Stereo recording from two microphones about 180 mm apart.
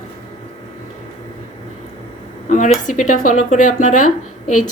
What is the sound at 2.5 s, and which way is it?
Speech, 45° left (ahead or behind).